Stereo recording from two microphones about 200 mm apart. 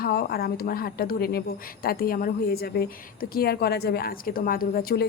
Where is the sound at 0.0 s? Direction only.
50° left (ahead or behind).